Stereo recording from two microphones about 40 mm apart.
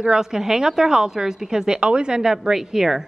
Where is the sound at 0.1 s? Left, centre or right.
Centre.